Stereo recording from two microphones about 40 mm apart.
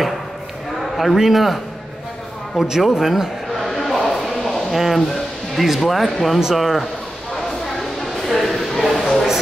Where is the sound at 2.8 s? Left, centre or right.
Centre.